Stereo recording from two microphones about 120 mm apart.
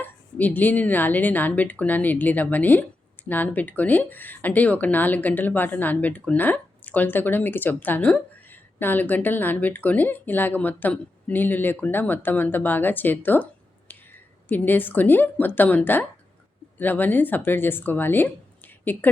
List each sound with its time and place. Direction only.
0.0 s speech: 15° left (ahead or behind)